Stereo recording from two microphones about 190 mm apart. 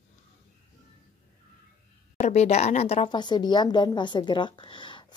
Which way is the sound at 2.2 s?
35° left (ahead or behind).